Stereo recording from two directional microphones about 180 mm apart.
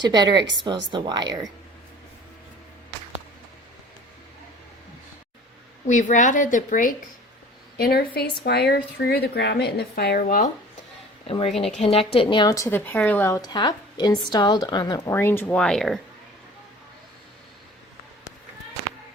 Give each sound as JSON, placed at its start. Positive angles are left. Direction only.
{"t": 0.0, "sound": "speech", "side_deg": -25}
{"t": 5.9, "sound": "a woman's voice", "side_deg": 45}
{"t": 7.8, "sound": "speech", "side_deg": 60}
{"t": 10.2, "sound": "a woman's voice", "side_deg": 45}
{"t": 11.3, "sound": "a woman's voice", "side_deg": 30}